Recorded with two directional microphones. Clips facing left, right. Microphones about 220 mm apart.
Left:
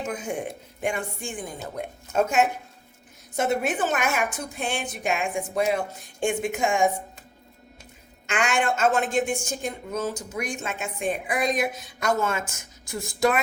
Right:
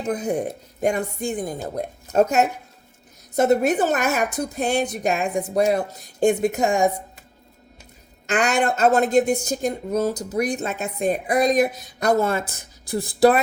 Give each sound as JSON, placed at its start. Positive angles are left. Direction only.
{"t": 0.0, "sound": "a woman's voice", "side_deg": -35}
{"t": 8.3, "sound": "a woman's voice", "side_deg": -40}